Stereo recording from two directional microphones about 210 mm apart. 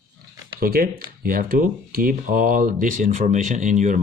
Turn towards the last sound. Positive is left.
turn(degrees=-35)  # may be behind; listen again after turning